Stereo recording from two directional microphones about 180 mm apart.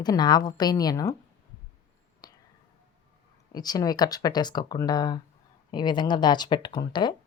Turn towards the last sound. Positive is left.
turn(degrees=25)  # may be behind; listen again after turning